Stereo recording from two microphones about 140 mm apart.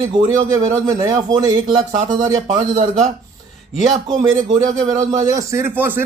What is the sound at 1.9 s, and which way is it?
Speech, 65° right (ahead or behind).